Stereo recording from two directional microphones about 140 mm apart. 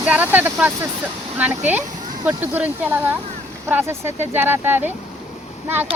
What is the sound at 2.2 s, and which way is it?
Speech, 15° right (ahead or behind).